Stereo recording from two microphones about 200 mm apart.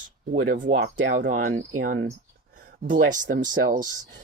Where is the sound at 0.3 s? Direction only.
45° right (ahead or behind).